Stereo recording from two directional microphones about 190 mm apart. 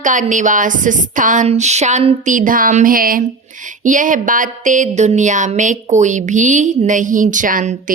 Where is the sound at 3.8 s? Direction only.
45° right (ahead or behind).